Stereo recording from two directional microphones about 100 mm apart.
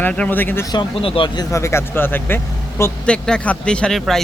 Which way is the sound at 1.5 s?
30° left (ahead or behind).